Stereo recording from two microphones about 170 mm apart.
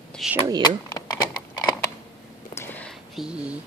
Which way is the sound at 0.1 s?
5° right (ahead or behind).